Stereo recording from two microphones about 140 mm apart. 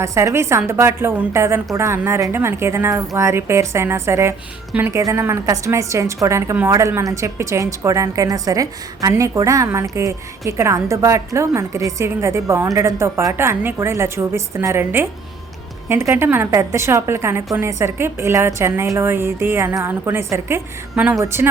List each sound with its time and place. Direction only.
0.0 s a woman's voice: 20° right (ahead or behind)